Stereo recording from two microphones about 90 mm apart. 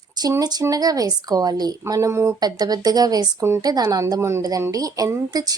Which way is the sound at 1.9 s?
35° right (ahead or behind).